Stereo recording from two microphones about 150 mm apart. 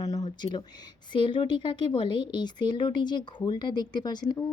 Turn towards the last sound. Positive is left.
turn(degrees=30)  # may be behind; listen again after turning